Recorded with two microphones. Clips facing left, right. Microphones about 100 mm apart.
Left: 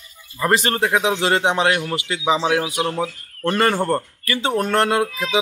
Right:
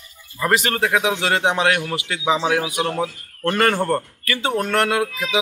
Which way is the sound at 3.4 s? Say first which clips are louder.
Even; 20° left (ahead or behind).